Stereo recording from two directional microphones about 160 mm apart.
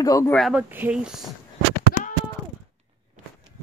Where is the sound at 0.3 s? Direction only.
Centre (ahead or behind).